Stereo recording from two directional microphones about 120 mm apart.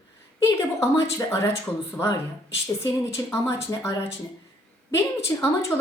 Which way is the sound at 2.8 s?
25° left (ahead or behind).